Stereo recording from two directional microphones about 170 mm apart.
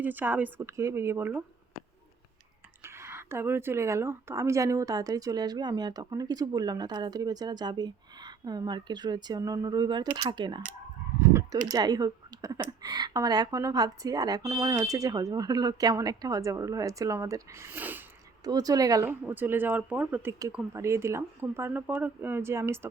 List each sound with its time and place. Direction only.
0.0 s speech: 10° right (ahead or behind)
2.8 s a woman's voice: 15° right (ahead or behind)
11.7 s a woman's voice: 25° right (ahead or behind)
18.4 s a woman's voice: 20° right (ahead or behind)